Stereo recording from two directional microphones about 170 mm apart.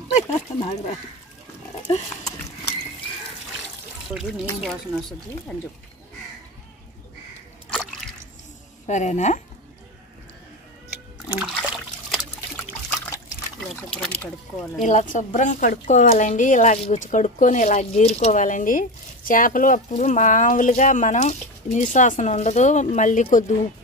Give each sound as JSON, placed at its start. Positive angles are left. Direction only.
{"t": 0.1, "sound": "speech", "side_deg": 40}
{"t": 4.1, "sound": "speech", "side_deg": -5}
{"t": 8.8, "sound": "a woman's voice", "side_deg": 45}
{"t": 11.3, "sound": "water", "side_deg": -5}
{"t": 13.6, "sound": "speech", "side_deg": 5}
{"t": 14.8, "sound": "a woman's voice", "side_deg": 45}